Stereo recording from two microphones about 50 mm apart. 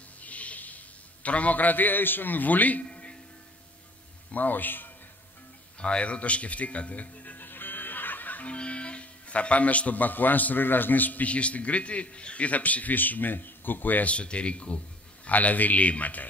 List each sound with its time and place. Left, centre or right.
0.2 s a sound: left
4.3 s a man's voice: left
5.8 s music: left
8.5 s speech: left
14.1 s speech: left